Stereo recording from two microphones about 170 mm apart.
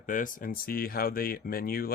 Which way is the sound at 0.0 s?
50° left (ahead or behind).